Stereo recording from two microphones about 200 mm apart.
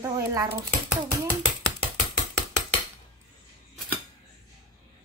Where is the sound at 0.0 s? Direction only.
15° right (ahead or behind).